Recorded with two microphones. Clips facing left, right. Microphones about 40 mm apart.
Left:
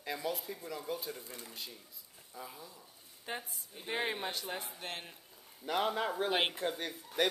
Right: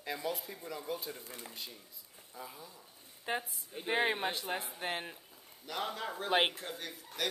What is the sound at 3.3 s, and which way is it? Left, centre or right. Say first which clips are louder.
Speech: right 5 dB; centre.